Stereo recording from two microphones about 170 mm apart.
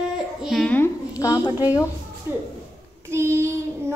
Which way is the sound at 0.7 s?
15° left (ahead or behind).